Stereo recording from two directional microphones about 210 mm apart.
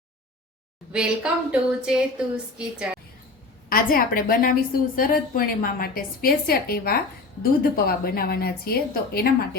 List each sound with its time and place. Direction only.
0.9 s a woman's voice: 5° right (ahead or behind)
3.7 s a woman's voice: 45° left (ahead or behind)